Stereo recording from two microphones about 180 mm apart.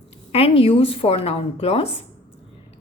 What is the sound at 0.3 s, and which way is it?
A woman's voice, 35° left (ahead or behind).